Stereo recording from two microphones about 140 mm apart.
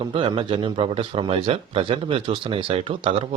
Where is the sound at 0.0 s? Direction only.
40° right (ahead or behind).